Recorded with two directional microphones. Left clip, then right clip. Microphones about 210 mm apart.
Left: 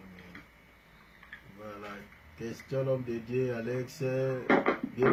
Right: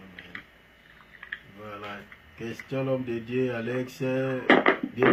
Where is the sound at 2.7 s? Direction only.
10° right (ahead or behind).